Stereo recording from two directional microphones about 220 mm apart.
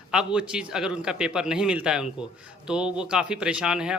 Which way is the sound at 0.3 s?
5° right (ahead or behind).